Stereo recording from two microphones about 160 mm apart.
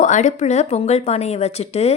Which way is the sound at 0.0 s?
50° left (ahead or behind).